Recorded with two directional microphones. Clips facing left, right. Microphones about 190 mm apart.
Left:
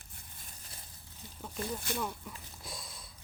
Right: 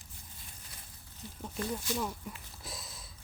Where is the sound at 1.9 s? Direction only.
55° left (ahead or behind).